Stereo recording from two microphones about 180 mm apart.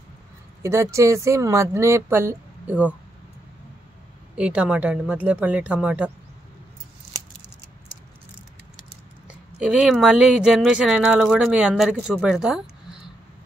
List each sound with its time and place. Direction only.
0.6 s speech: 15° right (ahead or behind)
4.4 s speech: 5° right (ahead or behind)
9.3 s speech: 5° right (ahead or behind)